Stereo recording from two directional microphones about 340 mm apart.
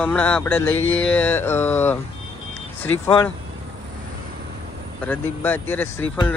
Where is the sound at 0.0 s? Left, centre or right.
Centre.